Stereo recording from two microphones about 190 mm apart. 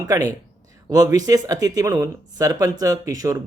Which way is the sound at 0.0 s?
20° right (ahead or behind).